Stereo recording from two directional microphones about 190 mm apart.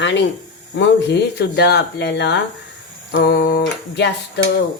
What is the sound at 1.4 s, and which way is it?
Speech, 60° left (ahead or behind).